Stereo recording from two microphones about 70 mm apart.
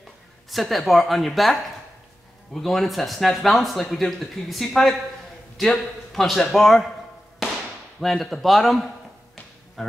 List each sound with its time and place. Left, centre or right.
0.5 s speech: centre
8.0 s speech: centre